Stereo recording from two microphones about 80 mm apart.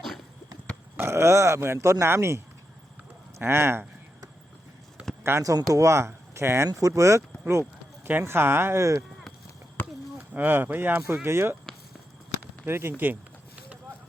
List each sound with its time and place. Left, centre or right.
0.9 s speech: right
5.4 s speech: right
6.7 s speech: right
8.0 s speech: right
10.3 s speech: right
12.6 s speech: right